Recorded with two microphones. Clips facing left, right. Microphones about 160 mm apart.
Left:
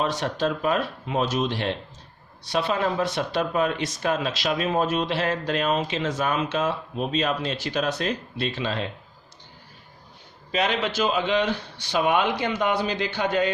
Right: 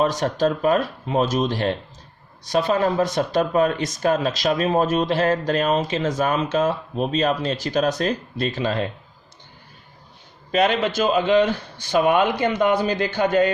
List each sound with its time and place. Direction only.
0.0 s speech: 45° right (ahead or behind)
10.5 s speech: 50° right (ahead or behind)